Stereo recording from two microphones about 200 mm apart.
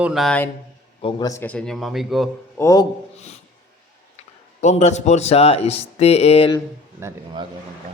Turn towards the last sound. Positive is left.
turn(degrees=25)  # may be behind; listen again after turning